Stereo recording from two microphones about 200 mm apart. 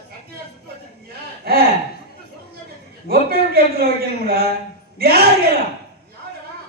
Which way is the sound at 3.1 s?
50° right (ahead or behind).